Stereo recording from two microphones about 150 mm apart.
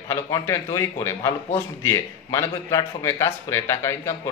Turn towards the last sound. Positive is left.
turn(degrees=20)  # may be behind; listen again after turning